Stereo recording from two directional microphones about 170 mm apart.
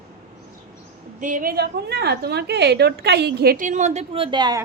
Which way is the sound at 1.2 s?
50° right (ahead or behind).